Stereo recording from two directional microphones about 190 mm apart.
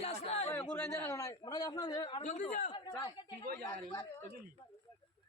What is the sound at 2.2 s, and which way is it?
Speech, 40° left (ahead or behind).